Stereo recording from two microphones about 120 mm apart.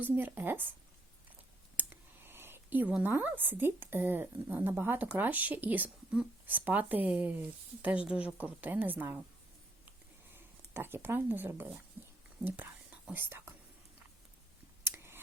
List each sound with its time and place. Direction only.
0.0 s speech: 15° right (ahead or behind)
1.7 s speech: 15° right (ahead or behind)
10.3 s speech: 20° right (ahead or behind)
14.8 s a sound: 20° right (ahead or behind)